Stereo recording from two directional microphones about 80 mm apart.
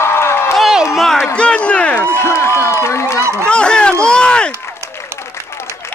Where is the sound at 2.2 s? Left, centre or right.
Left.